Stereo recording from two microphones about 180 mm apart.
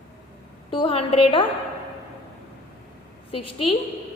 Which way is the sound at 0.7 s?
30° left (ahead or behind).